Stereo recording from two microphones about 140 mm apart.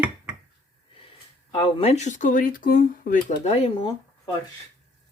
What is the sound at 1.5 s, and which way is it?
Speech, 40° left (ahead or behind).